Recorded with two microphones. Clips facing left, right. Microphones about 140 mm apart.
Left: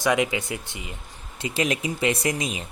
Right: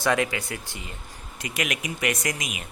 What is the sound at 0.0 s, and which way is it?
Speech, 15° left (ahead or behind).